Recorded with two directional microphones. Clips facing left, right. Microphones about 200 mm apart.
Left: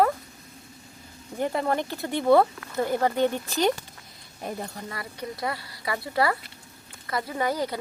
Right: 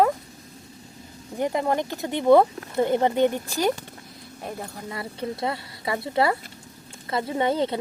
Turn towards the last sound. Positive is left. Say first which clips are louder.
# right 4 dB
turn(degrees=-25)  # may be behind; listen again after turning